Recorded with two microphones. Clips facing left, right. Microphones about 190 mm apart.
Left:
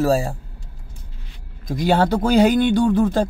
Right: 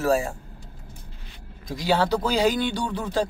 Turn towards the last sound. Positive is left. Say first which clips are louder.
# left 9 dB
turn(degrees=50)  # may be behind; listen again after turning